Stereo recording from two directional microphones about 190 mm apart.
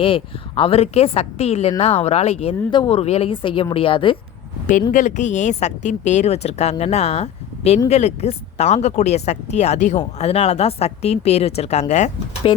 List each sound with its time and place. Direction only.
0.0 s speech: 30° left (ahead or behind)
4.9 s speech: 40° left (ahead or behind)